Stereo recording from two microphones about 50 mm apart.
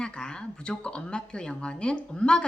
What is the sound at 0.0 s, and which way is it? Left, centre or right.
A woman's voice, centre.